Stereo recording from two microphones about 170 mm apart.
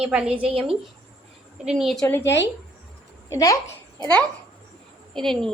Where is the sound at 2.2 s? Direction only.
90° left.